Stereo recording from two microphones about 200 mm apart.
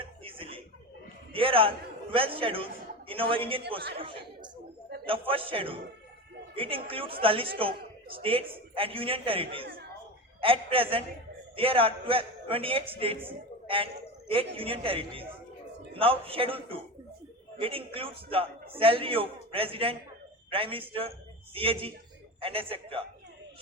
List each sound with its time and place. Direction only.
0.0 s chuckle: 25° right (ahead or behind)
1.3 s a man's voice: 25° right (ahead or behind)